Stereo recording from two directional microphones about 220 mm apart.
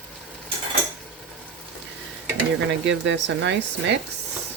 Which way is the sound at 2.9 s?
55° right (ahead or behind).